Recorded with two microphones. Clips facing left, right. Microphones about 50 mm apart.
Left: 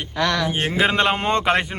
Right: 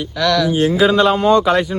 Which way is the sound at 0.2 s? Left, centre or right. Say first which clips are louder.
Right 6 dB; left.